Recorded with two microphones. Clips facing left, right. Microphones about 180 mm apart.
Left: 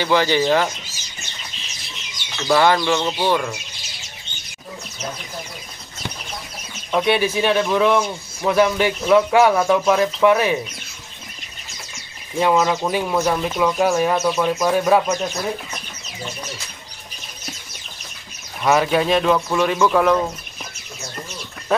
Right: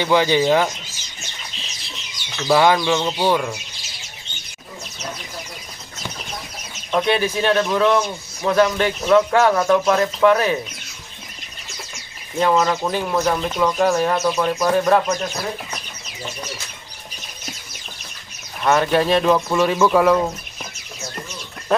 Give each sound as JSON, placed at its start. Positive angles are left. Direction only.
{"t": 0.0, "sound": "speech", "side_deg": -15}
{"t": 2.4, "sound": "speech", "side_deg": -15}
{"t": 6.9, "sound": "speech", "side_deg": 5}
{"t": 12.4, "sound": "speech", "side_deg": 5}
{"t": 18.6, "sound": "speech", "side_deg": 5}